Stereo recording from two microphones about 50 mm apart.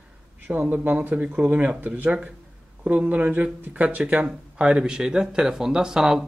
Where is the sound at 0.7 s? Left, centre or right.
Right.